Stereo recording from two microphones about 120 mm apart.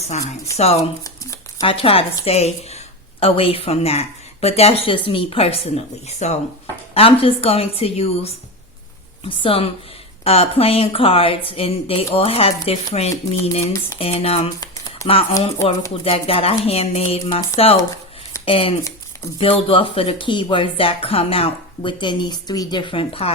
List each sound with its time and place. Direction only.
0.5 s a woman's voice: 60° left (ahead or behind)
1.0 s shuffling cards: 25° left (ahead or behind)
1.6 s a woman's voice: 50° left (ahead or behind); by 6.4 s 70° left (ahead or behind)
6.9 s a woman's voice: 55° left (ahead or behind)
16.0 s speech: 50° left (ahead or behind)
18.4 s speech: 50° left (ahead or behind)